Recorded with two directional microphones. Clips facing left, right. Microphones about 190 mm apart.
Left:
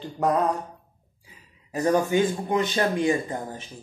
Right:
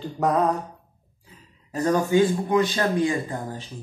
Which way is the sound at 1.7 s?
15° left (ahead or behind).